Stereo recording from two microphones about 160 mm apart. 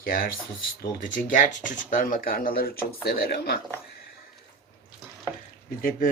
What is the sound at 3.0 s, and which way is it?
Speech, 85° left.